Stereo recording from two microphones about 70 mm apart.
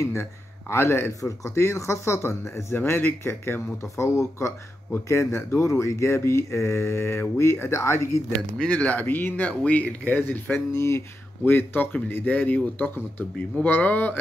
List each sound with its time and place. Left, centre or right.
0.0 s speech: left
3.7 s speech: left
8.5 s speech: centre